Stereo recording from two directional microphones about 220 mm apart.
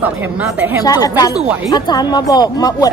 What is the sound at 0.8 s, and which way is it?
Speech, 15° left (ahead or behind).